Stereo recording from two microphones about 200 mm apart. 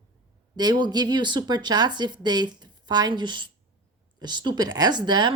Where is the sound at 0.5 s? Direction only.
20° right (ahead or behind).